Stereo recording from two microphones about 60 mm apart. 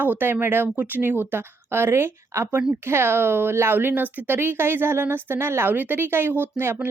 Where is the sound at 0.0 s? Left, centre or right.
Right.